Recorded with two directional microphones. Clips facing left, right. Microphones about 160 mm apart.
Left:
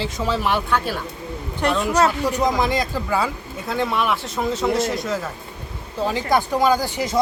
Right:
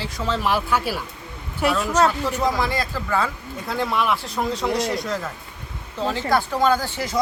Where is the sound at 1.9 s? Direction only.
10° left (ahead or behind).